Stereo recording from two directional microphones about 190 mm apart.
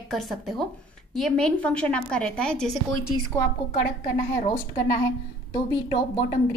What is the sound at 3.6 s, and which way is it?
Speech, 55° left (ahead or behind).